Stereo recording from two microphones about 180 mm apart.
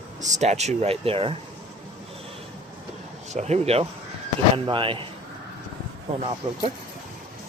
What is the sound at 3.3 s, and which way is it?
A man's voice, 40° right (ahead or behind).